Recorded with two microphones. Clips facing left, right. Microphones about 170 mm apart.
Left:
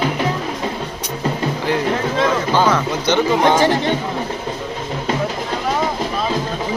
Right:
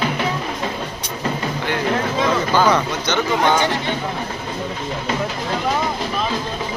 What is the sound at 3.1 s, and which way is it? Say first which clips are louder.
Speech: left 3 dB; 25° left (ahead or behind).